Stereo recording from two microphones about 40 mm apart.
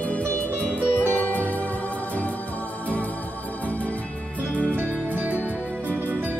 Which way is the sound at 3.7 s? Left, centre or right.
Left.